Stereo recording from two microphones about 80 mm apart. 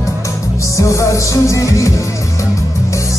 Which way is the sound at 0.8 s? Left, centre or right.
Left.